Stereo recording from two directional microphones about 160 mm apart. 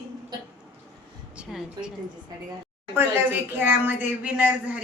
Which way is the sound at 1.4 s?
5° right (ahead or behind).